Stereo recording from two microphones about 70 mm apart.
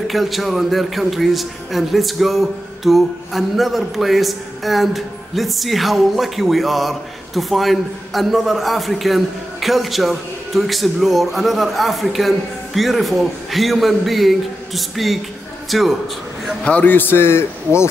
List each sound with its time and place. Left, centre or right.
0.1 s a man's voice: centre
16.6 s a man's voice: centre
16.9 s a man's voice: left